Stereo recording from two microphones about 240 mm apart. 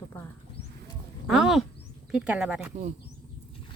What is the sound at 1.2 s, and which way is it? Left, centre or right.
Speech, centre.